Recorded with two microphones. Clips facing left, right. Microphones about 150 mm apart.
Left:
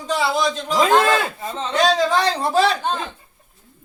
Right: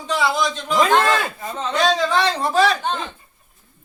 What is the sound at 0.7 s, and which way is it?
Speech, 5° left (ahead or behind).